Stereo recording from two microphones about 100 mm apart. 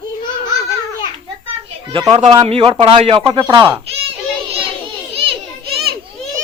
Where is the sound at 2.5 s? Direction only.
70° right (ahead or behind); by 3.6 s 50° right (ahead or behind).